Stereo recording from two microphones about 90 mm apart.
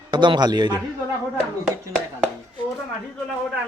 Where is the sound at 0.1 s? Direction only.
55° right (ahead or behind).